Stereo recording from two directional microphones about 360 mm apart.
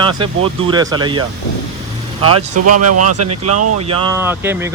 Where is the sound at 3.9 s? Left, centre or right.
Centre.